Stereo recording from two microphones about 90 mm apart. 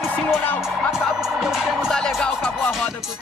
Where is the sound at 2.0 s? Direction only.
10° left (ahead or behind).